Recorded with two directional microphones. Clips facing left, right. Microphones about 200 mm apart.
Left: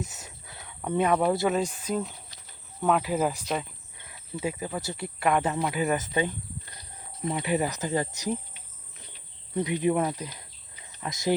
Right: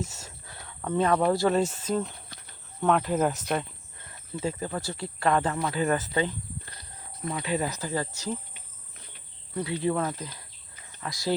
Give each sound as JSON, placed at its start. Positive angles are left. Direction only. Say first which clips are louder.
{"t": 0.1, "sound": "a sound", "louder": "right 1 dB", "side_deg": 20}
{"t": 1.5, "sound": "speech", "louder": "right 2 dB", "side_deg": 10}
{"t": 3.5, "sound": "cricket", "louder": "right 1 dB", "side_deg": 5}
{"t": 4.4, "sound": "speech", "louder": "even", "side_deg": 10}
{"t": 9.6, "sound": "speech", "louder": "left 2 dB", "side_deg": 15}